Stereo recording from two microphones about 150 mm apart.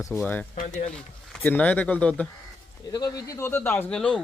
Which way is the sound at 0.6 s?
55° left (ahead or behind).